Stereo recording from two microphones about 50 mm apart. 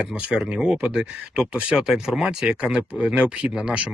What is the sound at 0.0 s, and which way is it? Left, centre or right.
Speech, centre.